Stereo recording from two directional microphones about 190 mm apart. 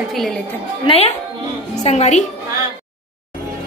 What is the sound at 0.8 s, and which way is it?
A woman's voice, 30° left (ahead or behind).